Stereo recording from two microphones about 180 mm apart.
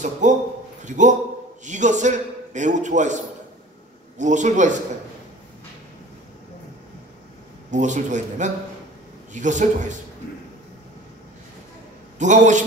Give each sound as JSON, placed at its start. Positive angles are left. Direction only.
{"t": 0.0, "sound": "a man's voice", "side_deg": -40}
{"t": 4.2, "sound": "a man's voice", "side_deg": -40}
{"t": 7.7, "sound": "a man's voice", "side_deg": -40}
{"t": 12.2, "sound": "a man's voice", "side_deg": -40}